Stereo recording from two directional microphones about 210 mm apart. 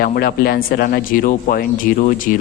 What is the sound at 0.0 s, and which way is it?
Speech, 45° left (ahead or behind).